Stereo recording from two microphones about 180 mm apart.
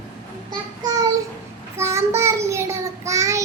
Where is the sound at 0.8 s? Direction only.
20° right (ahead or behind).